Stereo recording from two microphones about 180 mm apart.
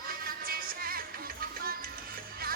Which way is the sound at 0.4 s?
55° right (ahead or behind).